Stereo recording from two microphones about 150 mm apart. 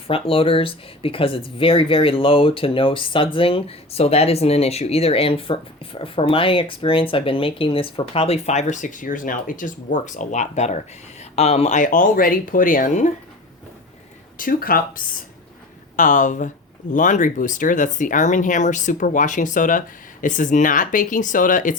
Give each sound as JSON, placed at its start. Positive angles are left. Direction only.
{"t": 0.1, "sound": "speech", "side_deg": 40}
{"t": 14.3, "sound": "speech", "side_deg": 70}
{"t": 16.0, "sound": "speech", "side_deg": 60}